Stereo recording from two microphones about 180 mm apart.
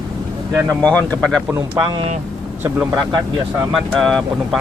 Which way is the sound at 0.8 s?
10° left (ahead or behind).